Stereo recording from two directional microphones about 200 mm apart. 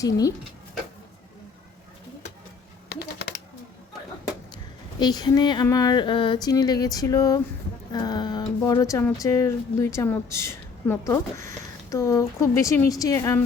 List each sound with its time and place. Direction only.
0.0 s a woman's voice: 15° left (ahead or behind)
2.9 s typing: 55° left (ahead or behind)
4.5 s a woman's voice: 20° left (ahead or behind)